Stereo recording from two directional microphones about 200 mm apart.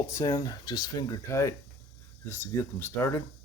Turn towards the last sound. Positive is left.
turn(degrees=10)  # may be behind; listen again after turning